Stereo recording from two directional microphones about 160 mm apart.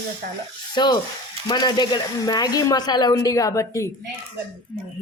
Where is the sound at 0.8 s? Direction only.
30° left (ahead or behind).